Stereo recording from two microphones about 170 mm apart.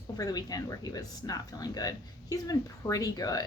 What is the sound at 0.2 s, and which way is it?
Speech, 20° left (ahead or behind).